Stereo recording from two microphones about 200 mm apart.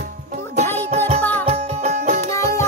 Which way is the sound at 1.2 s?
5° left (ahead or behind).